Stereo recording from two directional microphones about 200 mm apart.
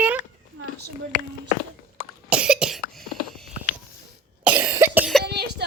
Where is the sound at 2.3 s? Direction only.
5° right (ahead or behind).